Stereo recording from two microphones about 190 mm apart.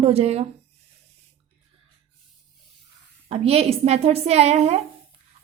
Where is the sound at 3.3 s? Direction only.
30° right (ahead or behind).